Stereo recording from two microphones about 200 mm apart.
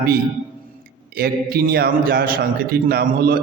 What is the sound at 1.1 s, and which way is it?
A man's voice, 50° right (ahead or behind).